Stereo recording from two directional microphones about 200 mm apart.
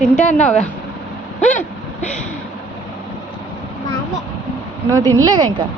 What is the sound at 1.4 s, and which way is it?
Vehicle, 40° left (ahead or behind).